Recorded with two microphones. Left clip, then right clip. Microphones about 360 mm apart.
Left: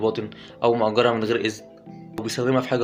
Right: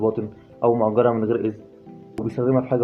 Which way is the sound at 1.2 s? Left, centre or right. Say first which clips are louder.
Even; right.